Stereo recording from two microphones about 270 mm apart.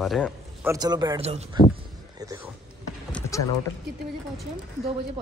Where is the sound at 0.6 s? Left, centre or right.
Centre.